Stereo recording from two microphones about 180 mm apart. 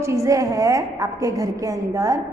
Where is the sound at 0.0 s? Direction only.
15° right (ahead or behind).